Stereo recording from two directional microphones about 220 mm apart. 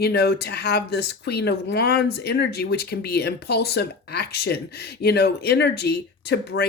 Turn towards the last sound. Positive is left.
turn(degrees=50)  # may be behind; listen again after turning